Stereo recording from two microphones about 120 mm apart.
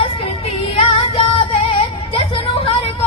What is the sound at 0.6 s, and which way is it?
Music, 55° left (ahead or behind).